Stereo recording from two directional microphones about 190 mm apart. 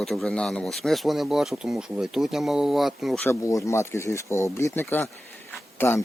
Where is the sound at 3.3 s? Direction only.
15° left (ahead or behind).